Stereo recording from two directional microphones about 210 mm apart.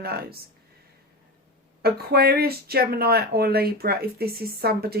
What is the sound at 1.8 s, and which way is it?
Speech, 45° right (ahead or behind).